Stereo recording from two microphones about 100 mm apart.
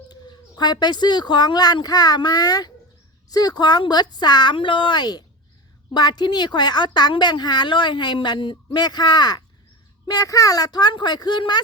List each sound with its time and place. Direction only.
0.1 s speech: 45° left (ahead or behind)